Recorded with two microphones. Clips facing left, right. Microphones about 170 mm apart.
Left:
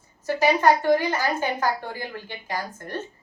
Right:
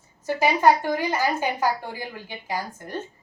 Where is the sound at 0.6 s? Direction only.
15° right (ahead or behind).